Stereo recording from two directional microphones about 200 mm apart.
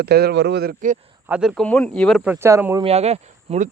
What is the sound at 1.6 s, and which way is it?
Speech, 5° left (ahead or behind).